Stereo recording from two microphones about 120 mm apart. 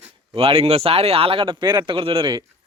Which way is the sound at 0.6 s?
55° right (ahead or behind).